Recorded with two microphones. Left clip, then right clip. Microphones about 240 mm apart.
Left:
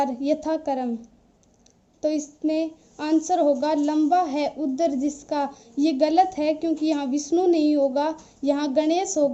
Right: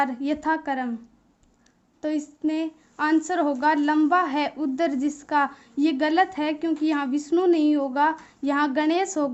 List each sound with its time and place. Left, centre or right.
0.0 s a woman's voice: centre
2.0 s a woman's voice: centre